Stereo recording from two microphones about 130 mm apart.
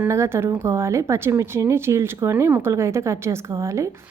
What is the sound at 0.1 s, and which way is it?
Speech, 20° right (ahead or behind).